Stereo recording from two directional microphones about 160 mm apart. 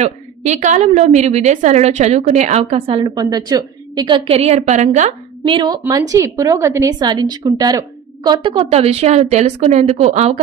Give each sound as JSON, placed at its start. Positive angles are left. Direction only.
{"t": 0.0, "sound": "a woman's voice", "side_deg": -45}
{"t": 2.6, "sound": "a woman's voice", "side_deg": -35}
{"t": 5.4, "sound": "a woman's voice", "side_deg": -30}